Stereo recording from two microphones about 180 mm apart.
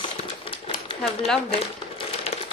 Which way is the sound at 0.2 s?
30° left (ahead or behind).